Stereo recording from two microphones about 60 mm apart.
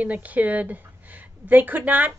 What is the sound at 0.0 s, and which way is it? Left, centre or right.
A woman's voice, right.